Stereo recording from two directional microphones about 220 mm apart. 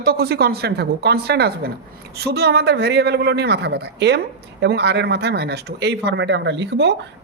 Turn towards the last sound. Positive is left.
turn(degrees=-50)  # may be behind; listen again after turning